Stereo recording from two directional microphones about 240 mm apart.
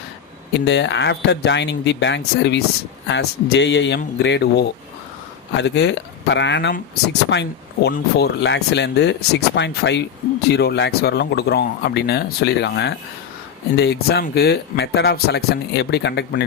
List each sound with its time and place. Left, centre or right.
0.5 s speech: left